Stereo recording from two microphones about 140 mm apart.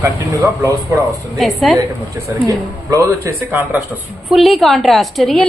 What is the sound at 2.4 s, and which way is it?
A woman's voice, 25° right (ahead or behind).